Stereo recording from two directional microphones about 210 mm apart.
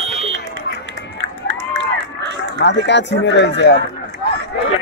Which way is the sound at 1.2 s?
55° right (ahead or behind).